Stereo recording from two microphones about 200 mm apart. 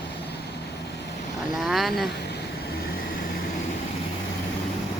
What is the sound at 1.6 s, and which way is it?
Speech, centre (ahead or behind).